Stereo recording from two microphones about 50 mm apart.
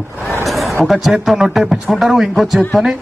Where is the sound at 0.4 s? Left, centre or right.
Centre.